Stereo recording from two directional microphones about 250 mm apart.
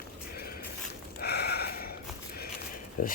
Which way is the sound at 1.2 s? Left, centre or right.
Left.